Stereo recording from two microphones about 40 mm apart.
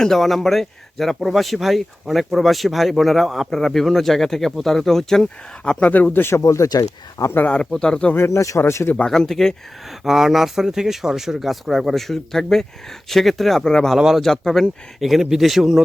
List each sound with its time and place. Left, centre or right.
0.0 s speech: centre
5.8 s speech: left
6.3 s speech: left
7.5 s speech: centre
8.1 s speech: left
9.0 s speech: centre
10.0 s speech: centre
13.7 s speech: centre
13.9 s speech: centre
14.2 s speech: centre
15.0 s speech: centre